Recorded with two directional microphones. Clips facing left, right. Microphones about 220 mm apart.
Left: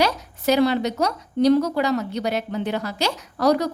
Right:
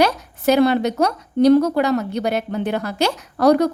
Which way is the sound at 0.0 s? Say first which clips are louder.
Right 4 dB; 55° right (ahead or behind).